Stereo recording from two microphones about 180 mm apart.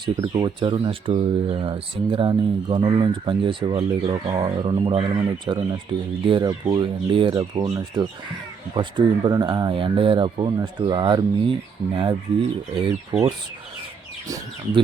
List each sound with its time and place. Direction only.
0.0 s speech: 20° right (ahead or behind)
12.8 s speech: 25° right (ahead or behind)